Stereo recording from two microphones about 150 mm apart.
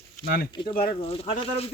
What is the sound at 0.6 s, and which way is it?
Speech, 35° left (ahead or behind).